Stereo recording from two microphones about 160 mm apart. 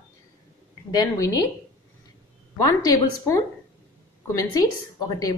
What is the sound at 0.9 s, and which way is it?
Speech, 20° left (ahead or behind).